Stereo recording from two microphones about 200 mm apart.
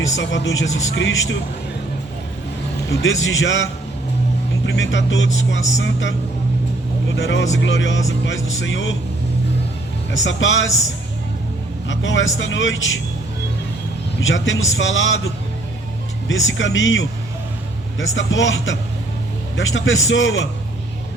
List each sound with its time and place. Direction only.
0.2 s a man's voice: 65° left (ahead or behind)
2.9 s a man's voice: 70° left (ahead or behind)
7.2 s speech: 65° left (ahead or behind)
10.2 s a man's voice: 70° left (ahead or behind)
11.9 s a man's voice: 70° left (ahead or behind)
14.2 s a man's voice: 70° left (ahead or behind)
16.3 s a man's voice: 70° left (ahead or behind)